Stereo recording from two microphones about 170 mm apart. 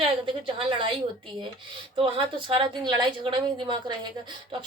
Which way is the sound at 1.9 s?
30° right (ahead or behind).